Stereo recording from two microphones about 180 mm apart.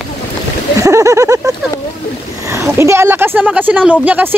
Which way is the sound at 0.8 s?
15° right (ahead or behind).